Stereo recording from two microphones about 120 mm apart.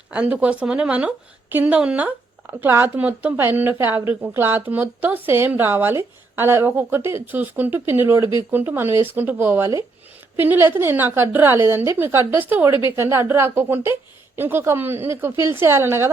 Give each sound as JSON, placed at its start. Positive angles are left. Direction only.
{"t": 0.1, "sound": "a woman's voice", "side_deg": -10}